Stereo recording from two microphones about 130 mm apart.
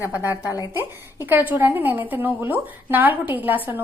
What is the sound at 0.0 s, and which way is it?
A woman's voice, 20° right (ahead or behind).